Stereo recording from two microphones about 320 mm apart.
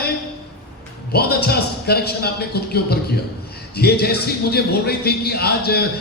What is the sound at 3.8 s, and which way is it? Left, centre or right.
Speech, left.